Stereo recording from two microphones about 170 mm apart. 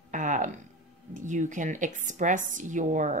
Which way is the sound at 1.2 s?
45° right (ahead or behind).